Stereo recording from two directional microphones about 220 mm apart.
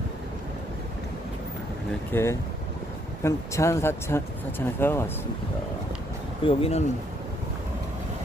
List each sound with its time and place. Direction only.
2.1 s speech: 10° left (ahead or behind)
6.4 s speech: 25° left (ahead or behind)